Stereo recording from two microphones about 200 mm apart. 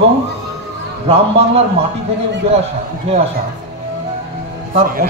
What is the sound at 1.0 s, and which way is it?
Speech, 30° right (ahead or behind).